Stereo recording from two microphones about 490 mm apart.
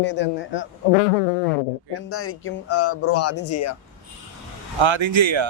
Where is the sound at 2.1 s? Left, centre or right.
Left.